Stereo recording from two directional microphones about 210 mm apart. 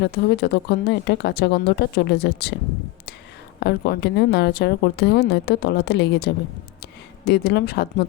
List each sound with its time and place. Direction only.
0.0 s a woman's voice: 50° left (ahead or behind)
3.6 s a woman's voice: 55° left (ahead or behind)